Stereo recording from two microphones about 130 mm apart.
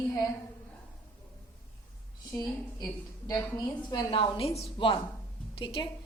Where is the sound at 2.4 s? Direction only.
30° left (ahead or behind).